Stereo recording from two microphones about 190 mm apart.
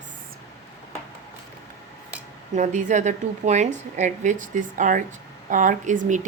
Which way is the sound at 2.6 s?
40° right (ahead or behind).